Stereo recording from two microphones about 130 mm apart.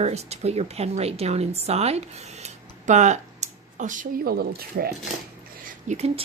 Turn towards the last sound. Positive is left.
turn(degrees=-55)  # may be behind; listen again after turning